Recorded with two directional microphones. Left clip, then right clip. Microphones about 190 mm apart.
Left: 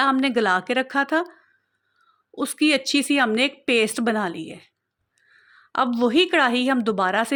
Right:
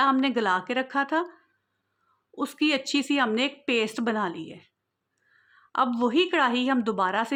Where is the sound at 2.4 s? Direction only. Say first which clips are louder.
Left 5 dB; 15° left (ahead or behind).